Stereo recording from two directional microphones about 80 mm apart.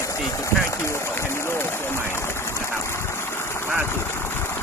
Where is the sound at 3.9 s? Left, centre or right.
Left.